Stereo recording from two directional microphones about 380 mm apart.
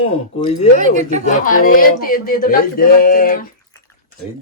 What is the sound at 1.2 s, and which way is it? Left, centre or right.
Speech, left.